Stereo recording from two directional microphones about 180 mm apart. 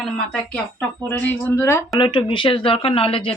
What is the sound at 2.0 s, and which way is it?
Speech, 25° left (ahead or behind).